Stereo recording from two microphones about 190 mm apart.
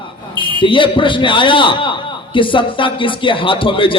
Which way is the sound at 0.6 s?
25° left (ahead or behind).